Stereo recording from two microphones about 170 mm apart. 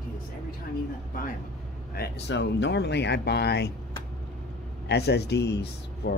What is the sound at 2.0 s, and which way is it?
Speech, 85° left.